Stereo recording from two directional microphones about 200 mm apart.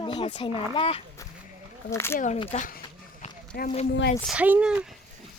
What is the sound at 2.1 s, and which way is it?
Speech, 40° left (ahead or behind).